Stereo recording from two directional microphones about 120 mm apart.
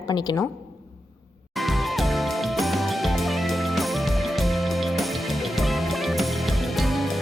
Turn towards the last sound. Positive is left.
turn(degrees=0)  # may be behind; listen again after turning